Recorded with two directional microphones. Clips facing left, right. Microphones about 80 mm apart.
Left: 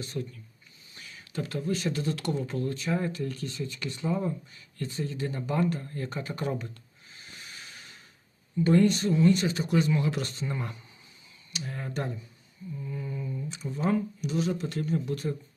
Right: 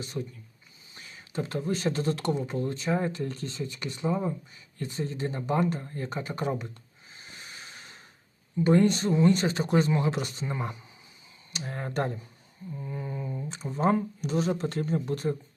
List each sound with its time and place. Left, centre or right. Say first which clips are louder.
0.0 s speech: even; centre; by 2.3 s right
2.3 s speech: right 1 dB; centre
7.1 s a sound: right 1 dB; right
8.6 s speech: even; right
11.5 s speech: right 3 dB; right
12.7 s speech: right 1 dB; right